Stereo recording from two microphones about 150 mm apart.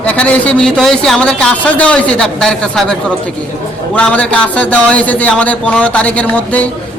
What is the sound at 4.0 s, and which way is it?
A man's voice, 5° left (ahead or behind).